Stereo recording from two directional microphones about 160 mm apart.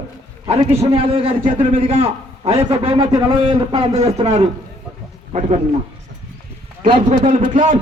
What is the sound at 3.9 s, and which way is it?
Speech, 40° right (ahead or behind).